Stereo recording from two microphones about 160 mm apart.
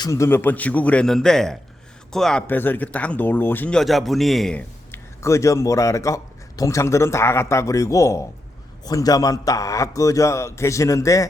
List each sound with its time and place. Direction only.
0.0 s speech: 20° left (ahead or behind); by 4.6 s centre (ahead or behind)
4.9 s speech: 20° left (ahead or behind)